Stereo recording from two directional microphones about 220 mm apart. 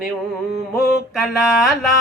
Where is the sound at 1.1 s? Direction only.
Centre (ahead or behind).